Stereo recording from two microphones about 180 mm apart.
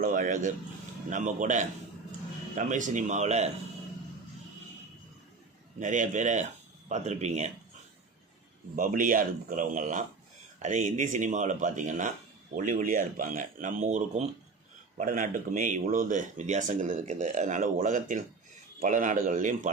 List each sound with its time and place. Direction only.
0.0 s speech: 50° right (ahead or behind)
5.8 s speech: 45° right (ahead or behind)
8.7 s speech: 50° right (ahead or behind)